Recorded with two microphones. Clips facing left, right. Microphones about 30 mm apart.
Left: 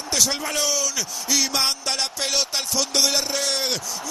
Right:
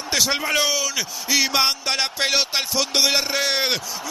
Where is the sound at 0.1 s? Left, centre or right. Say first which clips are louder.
Right 3 dB; right.